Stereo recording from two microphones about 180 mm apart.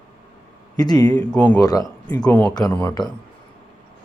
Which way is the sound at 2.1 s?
20° left (ahead or behind).